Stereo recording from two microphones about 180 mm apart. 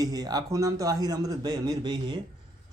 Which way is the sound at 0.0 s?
20° right (ahead or behind).